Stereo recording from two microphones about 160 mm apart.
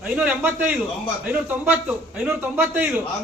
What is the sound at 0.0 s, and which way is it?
A man's voice, 10° right (ahead or behind).